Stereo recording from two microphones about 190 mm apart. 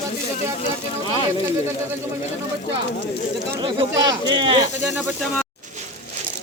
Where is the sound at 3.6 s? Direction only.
25° right (ahead or behind).